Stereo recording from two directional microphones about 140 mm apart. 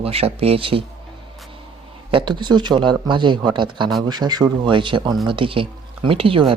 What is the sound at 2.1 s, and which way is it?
Speech, 35° right (ahead or behind).